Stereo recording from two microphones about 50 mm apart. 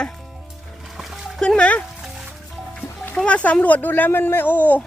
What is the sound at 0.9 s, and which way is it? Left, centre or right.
Music, centre.